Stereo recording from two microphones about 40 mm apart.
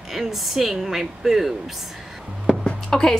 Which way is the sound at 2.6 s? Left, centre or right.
Centre.